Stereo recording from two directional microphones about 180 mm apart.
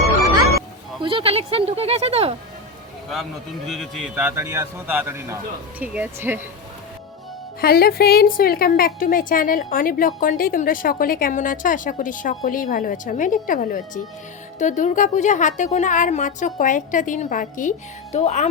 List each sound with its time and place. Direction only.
1.0 s speech: 30° right (ahead or behind)
3.7 s a man's voice: centre (ahead or behind)
7.6 s a woman's voice: 55° left (ahead or behind); by 18.4 s 40° left (ahead or behind)